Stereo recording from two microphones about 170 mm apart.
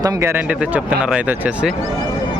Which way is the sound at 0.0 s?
20° right (ahead or behind).